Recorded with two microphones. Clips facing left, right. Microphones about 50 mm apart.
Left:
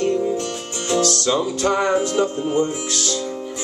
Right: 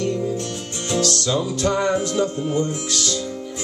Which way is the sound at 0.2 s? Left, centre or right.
Centre.